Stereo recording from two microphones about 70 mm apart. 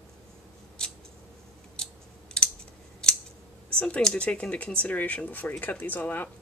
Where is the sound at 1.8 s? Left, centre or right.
Centre.